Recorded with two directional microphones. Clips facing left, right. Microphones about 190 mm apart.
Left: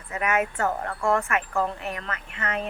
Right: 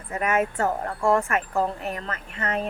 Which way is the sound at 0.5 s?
30° right (ahead or behind).